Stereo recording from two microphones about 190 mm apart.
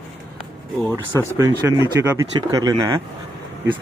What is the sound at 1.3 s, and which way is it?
Speech, 15° right (ahead or behind).